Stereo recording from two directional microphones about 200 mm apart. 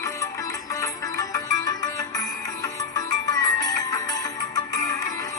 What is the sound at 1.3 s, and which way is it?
Music, 20° left (ahead or behind).